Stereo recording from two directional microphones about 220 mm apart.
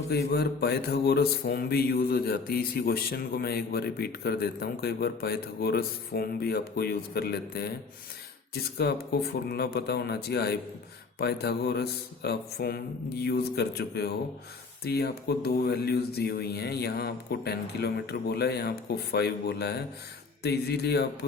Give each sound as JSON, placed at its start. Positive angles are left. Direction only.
{"t": 0.1, "sound": "speech", "side_deg": 45}